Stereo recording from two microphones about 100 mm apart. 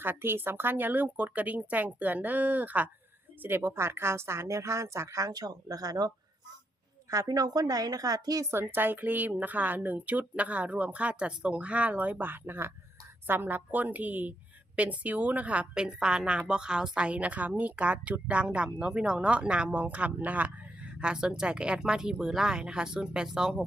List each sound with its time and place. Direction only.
0.0 s a woman's voice: 20° right (ahead or behind); by 6.1 s 40° right (ahead or behind)
7.1 s a woman's voice: 35° right (ahead or behind)
8.4 s a woman's voice: 20° right (ahead or behind)